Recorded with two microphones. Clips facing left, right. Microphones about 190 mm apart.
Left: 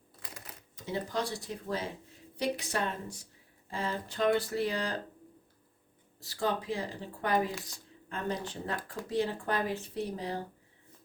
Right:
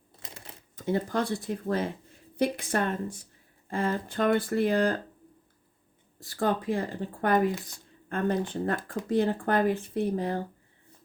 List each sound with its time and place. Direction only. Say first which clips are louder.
0.2 s typewriter: right 2 dB; 25° right (ahead or behind)
0.8 s speech: right 6 dB; 55° right (ahead or behind)
6.1 s speech: right 5 dB; 50° right (ahead or behind)